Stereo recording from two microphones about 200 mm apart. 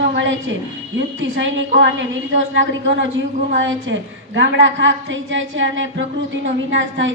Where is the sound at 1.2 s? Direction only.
65° right (ahead or behind).